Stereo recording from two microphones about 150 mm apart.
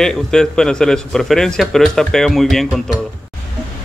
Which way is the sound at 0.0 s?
5° left (ahead or behind).